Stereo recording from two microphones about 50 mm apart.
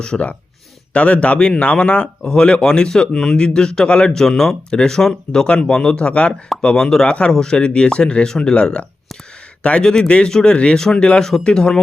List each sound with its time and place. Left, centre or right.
0.0 s a man's voice: left